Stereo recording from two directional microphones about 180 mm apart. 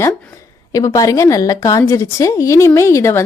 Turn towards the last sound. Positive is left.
turn(degrees=15)  # may be behind; listen again after turning